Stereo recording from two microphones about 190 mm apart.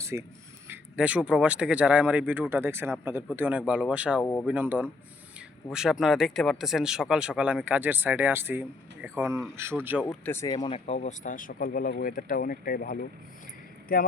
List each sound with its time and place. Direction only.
0.0 s speech: 15° right (ahead or behind)
4.2 s speech: 10° left (ahead or behind)
4.4 s speech: 10° right (ahead or behind)
10.0 s speech: 10° left (ahead or behind)
10.8 s speech: 35° left (ahead or behind); by 13.1 s 50° left (ahead or behind)